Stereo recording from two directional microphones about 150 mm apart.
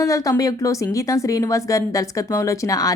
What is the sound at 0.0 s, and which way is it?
Speech, 20° left (ahead or behind).